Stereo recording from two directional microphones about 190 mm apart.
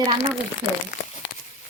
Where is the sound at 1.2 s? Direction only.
70° left (ahead or behind).